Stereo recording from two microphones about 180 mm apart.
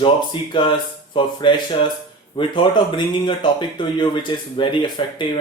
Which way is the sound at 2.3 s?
25° left (ahead or behind).